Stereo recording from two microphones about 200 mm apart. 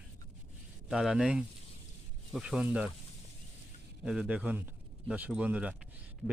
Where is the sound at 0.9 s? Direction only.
5° right (ahead or behind).